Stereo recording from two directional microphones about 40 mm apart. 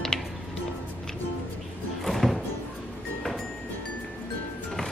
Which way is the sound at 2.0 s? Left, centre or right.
Centre.